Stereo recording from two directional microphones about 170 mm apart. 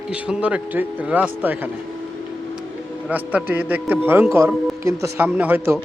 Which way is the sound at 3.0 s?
5° right (ahead or behind).